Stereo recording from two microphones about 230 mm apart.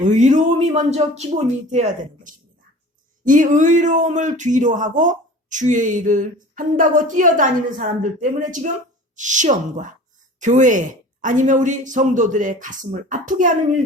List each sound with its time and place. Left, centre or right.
0.0 s speech: right